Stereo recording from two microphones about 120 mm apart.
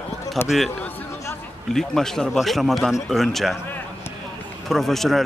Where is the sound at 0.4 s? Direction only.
20° left (ahead or behind).